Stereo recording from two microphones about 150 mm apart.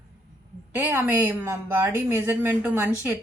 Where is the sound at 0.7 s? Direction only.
10° right (ahead or behind).